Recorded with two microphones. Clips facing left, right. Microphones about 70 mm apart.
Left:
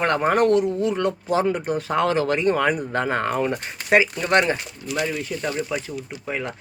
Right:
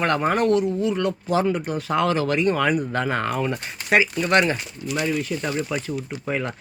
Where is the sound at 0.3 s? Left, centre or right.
Left.